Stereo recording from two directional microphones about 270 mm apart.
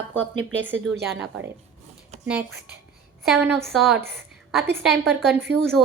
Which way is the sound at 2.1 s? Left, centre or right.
Right.